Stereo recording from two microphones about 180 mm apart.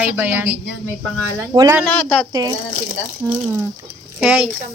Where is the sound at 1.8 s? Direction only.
5° left (ahead or behind).